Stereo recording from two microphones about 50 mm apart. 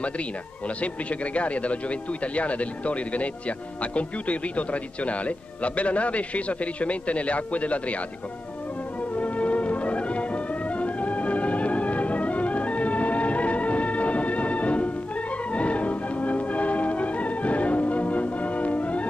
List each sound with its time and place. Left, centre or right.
0.7 s speech: left
9.1 s music: left